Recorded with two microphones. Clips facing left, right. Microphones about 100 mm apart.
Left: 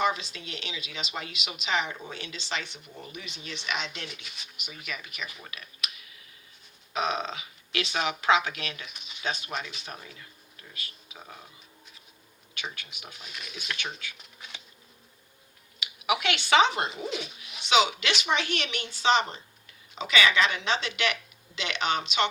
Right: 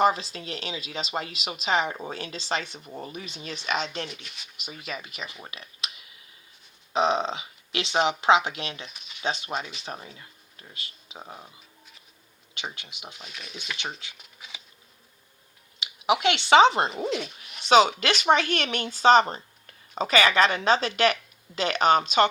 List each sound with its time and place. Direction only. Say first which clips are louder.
0.0 s speech: right 5 dB; 35° right (ahead or behind)
4.1 s speech: right 2 dB; centre (ahead or behind)
4.5 s speech: right 3 dB; 30° right (ahead or behind)
12.5 s speech: right 2 dB; 25° right (ahead or behind)
13.3 s speech: left 1 dB; 5° left (ahead or behind)
13.7 s speech: right 1 dB; 25° right (ahead or behind)
14.2 s bee: even; centre (ahead or behind)
15.8 s speech: right 5 dB; 30° right (ahead or behind)
17.1 s speech: right 5 dB; 5° left (ahead or behind)
17.7 s speech: right 5 dB; 45° right (ahead or behind)